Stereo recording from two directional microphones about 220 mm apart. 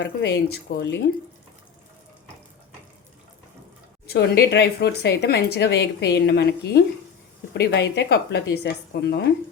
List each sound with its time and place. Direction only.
0.0 s speech: 50° left (ahead or behind)
4.0 s speech: 45° left (ahead or behind)